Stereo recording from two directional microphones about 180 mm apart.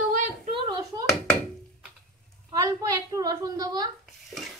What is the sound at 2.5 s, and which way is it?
A woman's voice, 20° right (ahead or behind).